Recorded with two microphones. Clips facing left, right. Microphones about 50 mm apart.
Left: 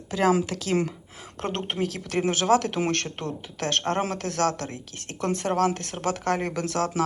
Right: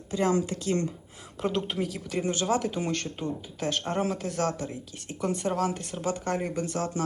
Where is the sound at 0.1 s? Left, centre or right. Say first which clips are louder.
Left 3 dB; left.